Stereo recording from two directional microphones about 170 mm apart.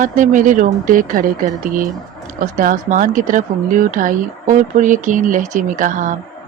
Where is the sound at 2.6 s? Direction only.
55° right (ahead or behind).